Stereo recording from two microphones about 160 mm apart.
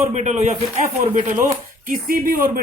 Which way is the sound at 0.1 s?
45° right (ahead or behind).